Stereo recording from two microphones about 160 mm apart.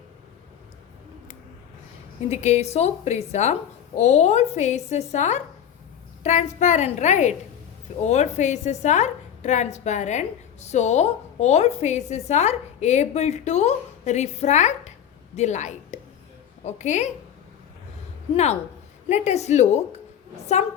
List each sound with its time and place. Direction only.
2.3 s a woman's voice: 45° left (ahead or behind)
19.0 s a woman's voice: 45° left (ahead or behind)